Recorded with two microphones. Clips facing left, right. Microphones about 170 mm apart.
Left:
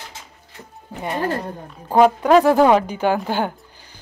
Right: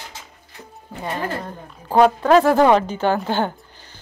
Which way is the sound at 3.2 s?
10° left (ahead or behind).